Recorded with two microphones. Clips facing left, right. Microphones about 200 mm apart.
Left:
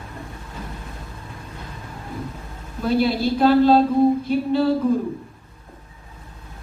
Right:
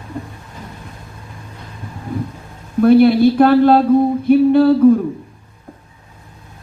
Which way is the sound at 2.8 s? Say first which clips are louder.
Right 11 dB; 55° right (ahead or behind).